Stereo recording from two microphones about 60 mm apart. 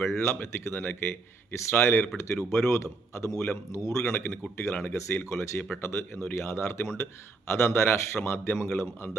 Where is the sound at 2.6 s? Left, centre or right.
Left.